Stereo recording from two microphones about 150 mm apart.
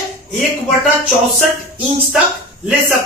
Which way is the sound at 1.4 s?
5° right (ahead or behind).